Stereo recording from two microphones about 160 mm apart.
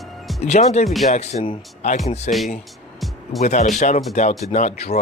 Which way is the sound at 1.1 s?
45° left (ahead or behind).